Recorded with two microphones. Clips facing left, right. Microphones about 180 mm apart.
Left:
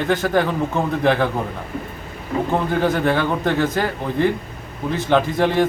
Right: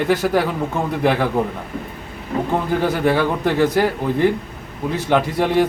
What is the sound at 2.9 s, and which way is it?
Speech, 5° right (ahead or behind).